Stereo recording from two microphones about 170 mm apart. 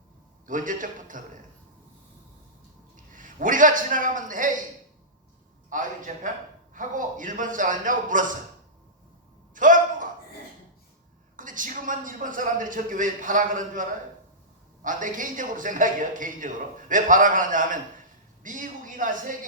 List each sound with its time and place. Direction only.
0.4 s a man's voice: 50° right (ahead or behind)
2.9 s a man's voice: 50° right (ahead or behind)
5.7 s a man's voice: 50° right (ahead or behind)
9.6 s a sound: 50° right (ahead or behind)
11.3 s a man's voice: 50° right (ahead or behind)
14.8 s a man's voice: 50° right (ahead or behind)